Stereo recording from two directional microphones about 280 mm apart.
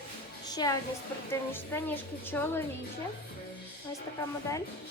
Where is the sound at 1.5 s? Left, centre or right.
Centre.